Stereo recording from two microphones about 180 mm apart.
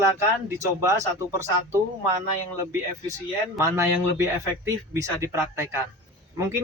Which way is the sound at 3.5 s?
15° right (ahead or behind).